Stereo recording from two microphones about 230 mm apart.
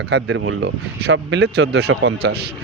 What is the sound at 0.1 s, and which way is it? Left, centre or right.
Speech, right.